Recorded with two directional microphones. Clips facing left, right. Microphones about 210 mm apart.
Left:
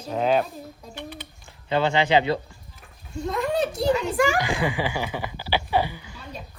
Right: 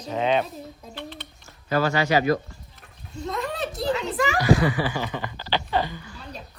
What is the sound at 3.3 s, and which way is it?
A woman's voice, centre (ahead or behind).